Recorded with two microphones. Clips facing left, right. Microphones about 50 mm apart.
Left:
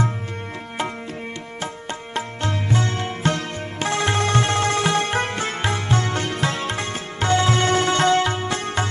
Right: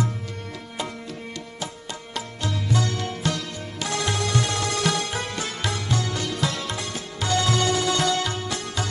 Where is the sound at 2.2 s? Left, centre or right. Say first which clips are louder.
Left 4 dB; left.